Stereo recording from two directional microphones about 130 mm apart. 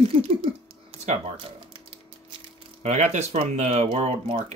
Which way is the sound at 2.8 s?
60° right (ahead or behind).